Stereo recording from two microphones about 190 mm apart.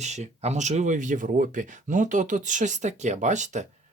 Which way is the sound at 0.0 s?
35° right (ahead or behind).